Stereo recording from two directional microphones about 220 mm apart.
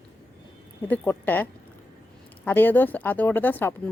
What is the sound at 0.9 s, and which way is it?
Speech, 10° left (ahead or behind).